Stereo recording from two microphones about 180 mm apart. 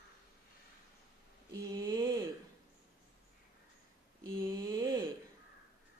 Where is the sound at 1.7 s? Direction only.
20° right (ahead or behind).